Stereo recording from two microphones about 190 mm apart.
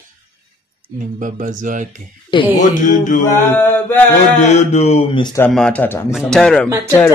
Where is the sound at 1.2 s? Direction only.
45° right (ahead or behind).